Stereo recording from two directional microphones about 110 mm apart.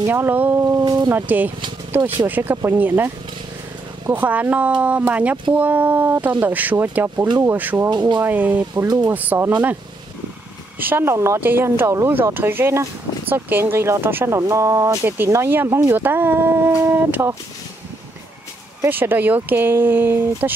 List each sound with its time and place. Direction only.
0.1 s speech: 15° right (ahead or behind)
0.7 s speech: 35° right (ahead or behind)
1.1 s speech: 15° right (ahead or behind)
4.1 s speech: 15° right (ahead or behind)
7.9 s speech: 40° right (ahead or behind)
8.2 s speech: 15° right (ahead or behind)
10.8 s speech: 20° right (ahead or behind)
18.9 s speech: 20° right (ahead or behind)